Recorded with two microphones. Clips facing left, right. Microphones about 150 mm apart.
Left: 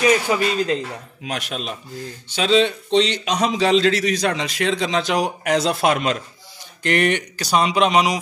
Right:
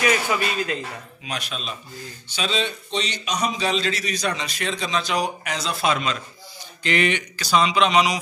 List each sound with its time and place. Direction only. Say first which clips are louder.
0.0 s speech: left 4 dB; 30° left (ahead or behind)
1.2 s a man's voice: left 4 dB; 60° left (ahead or behind)
2.3 s a man's voice: left 9 dB; 80° left; by 8.2 s 45° left (ahead or behind)